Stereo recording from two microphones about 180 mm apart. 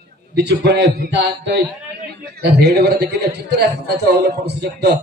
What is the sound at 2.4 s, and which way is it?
Speech, 65° right (ahead or behind).